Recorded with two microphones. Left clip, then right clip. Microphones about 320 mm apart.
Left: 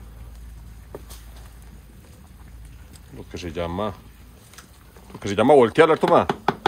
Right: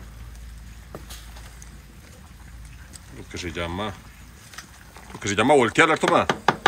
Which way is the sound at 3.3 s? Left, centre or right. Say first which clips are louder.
Left 1 dB; centre.